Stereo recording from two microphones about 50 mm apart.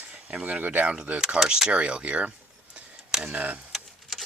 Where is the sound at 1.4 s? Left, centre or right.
Centre.